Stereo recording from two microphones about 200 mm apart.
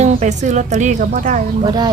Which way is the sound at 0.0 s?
35° right (ahead or behind).